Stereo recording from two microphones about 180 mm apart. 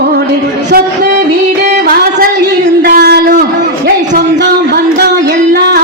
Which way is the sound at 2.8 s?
60° right (ahead or behind).